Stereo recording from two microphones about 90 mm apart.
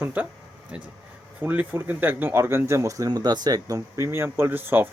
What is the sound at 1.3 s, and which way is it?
Speech, 20° right (ahead or behind).